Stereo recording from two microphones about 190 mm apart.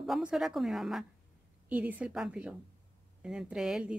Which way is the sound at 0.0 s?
Centre (ahead or behind).